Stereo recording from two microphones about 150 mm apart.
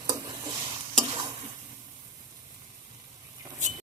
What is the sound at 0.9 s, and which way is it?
Stir, 40° right (ahead or behind).